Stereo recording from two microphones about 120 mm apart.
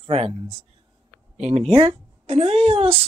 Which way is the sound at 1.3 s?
70° right (ahead or behind).